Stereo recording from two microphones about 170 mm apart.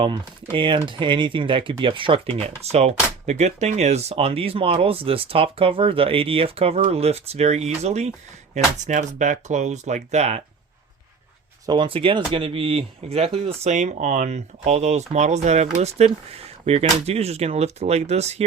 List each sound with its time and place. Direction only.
0.5 s speech: 30° right (ahead or behind)
11.6 s speech: 25° right (ahead or behind)